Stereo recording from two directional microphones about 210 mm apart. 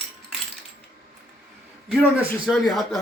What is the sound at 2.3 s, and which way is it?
Speech, centre (ahead or behind).